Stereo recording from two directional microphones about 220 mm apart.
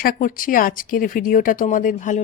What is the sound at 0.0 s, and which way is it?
Speech, 40° left (ahead or behind).